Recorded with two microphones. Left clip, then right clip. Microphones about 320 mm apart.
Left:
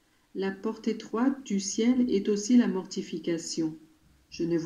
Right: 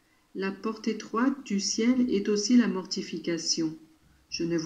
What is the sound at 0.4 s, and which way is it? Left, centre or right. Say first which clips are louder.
Speech: even; left.